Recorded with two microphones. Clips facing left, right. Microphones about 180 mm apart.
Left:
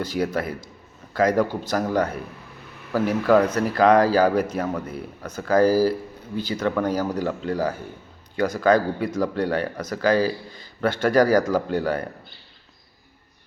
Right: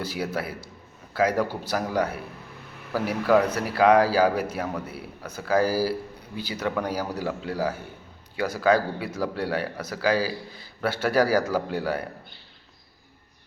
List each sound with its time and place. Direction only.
0.0 s speech: 10° right (ahead or behind)